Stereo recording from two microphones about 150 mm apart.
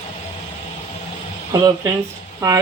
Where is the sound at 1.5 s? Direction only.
25° right (ahead or behind).